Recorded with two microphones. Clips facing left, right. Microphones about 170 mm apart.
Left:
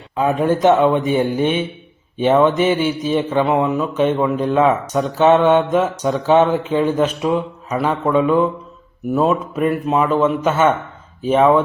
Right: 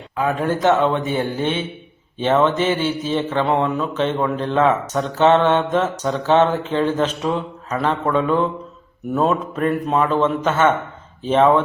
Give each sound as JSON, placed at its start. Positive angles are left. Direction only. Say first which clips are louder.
{"t": 0.2, "sound": "speech", "louder": "left 4 dB", "side_deg": 20}